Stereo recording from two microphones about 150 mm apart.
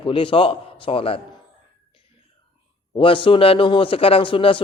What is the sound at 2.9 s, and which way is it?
A man's voice, 35° left (ahead or behind).